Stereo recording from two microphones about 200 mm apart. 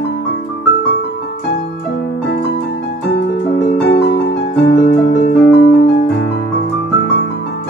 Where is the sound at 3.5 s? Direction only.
60° left (ahead or behind).